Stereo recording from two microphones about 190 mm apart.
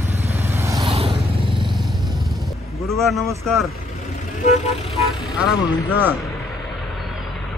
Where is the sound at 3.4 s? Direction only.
Centre (ahead or behind).